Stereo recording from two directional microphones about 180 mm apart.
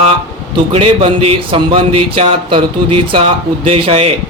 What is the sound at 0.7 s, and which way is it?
Speech, 30° right (ahead or behind).